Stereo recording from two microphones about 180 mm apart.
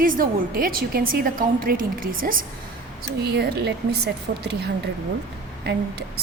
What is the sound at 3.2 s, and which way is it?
A woman's voice, 65° right (ahead or behind).